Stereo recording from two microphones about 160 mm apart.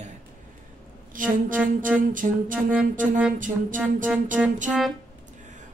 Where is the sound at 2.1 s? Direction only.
55° right (ahead or behind).